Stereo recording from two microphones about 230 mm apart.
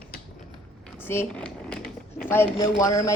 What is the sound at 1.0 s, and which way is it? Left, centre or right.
Speech, centre.